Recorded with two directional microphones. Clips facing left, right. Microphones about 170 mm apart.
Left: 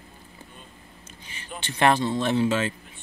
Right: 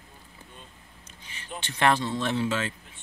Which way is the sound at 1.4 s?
5° left (ahead or behind).